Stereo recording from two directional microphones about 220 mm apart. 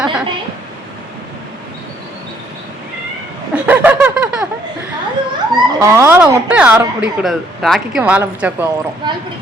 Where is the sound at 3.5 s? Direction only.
5° right (ahead or behind).